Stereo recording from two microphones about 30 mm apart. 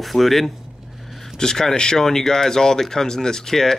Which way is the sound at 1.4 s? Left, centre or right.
Left.